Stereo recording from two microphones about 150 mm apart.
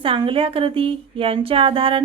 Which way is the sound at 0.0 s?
35° right (ahead or behind).